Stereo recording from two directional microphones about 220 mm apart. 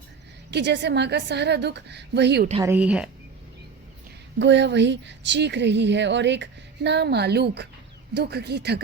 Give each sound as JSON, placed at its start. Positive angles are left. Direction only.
{"t": 0.5, "sound": "a woman's voice", "side_deg": -50}
{"t": 2.6, "sound": "speech", "side_deg": -5}
{"t": 4.4, "sound": "a woman's voice", "side_deg": -55}